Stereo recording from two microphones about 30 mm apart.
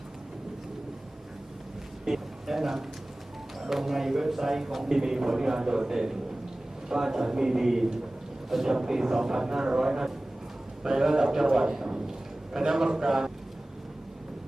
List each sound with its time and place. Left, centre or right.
2.0 s a man's voice: centre
11.9 s a sound: right
12.5 s a man's voice: centre